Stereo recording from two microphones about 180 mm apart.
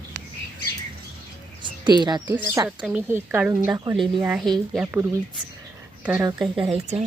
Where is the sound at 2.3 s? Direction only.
10° right (ahead or behind).